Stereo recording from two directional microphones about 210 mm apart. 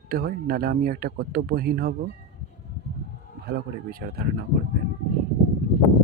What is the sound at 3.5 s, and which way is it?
Speech, 50° right (ahead or behind).